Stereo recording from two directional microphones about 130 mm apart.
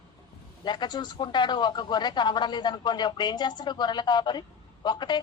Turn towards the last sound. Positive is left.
turn(degrees=35)  # may be behind; listen again after turning